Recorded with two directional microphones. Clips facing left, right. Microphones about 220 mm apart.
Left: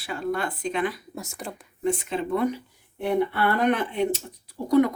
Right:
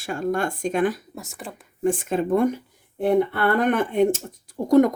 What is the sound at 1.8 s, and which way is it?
Speech, 45° right (ahead or behind).